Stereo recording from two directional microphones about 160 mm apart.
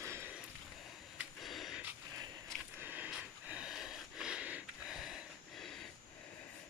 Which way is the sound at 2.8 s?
10° right (ahead or behind).